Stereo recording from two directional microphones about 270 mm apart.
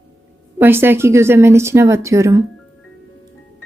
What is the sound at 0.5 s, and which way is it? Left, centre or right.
Speech, centre.